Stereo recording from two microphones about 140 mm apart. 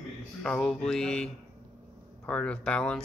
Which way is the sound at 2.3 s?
10° left (ahead or behind).